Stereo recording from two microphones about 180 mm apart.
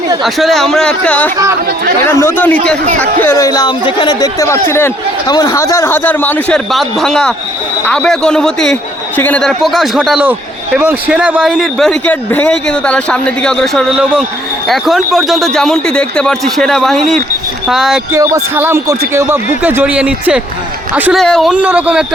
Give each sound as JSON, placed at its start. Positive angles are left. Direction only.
{"t": 0.2, "sound": "a man's voice", "side_deg": 0}
{"t": 18.1, "sound": "a man's voice", "side_deg": -15}